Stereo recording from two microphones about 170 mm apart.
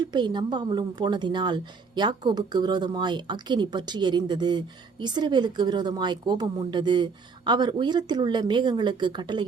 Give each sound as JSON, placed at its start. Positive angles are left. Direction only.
{"t": 0.0, "sound": "a woman's voice", "side_deg": -25}